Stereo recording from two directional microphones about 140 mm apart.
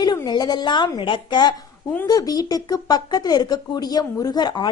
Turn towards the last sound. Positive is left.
turn(degrees=30)  # may be behind; listen again after turning